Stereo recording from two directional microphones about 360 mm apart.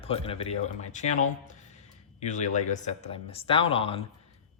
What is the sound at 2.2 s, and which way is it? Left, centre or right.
Speech, centre.